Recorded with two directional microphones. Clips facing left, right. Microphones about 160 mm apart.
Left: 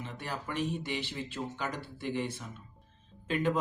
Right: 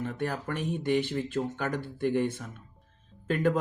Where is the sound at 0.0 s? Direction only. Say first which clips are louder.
Right 7 dB; 55° right (ahead or behind).